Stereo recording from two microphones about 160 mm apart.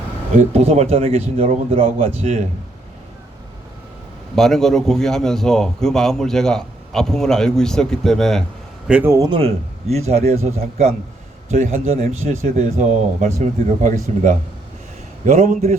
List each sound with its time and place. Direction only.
0.3 s a man's voice: 40° right (ahead or behind)
4.4 s a man's voice: centre (ahead or behind)
8.9 s a man's voice: 10° right (ahead or behind)
9.1 s a man's voice: 25° right (ahead or behind)
9.9 s a man's voice: 40° right (ahead or behind)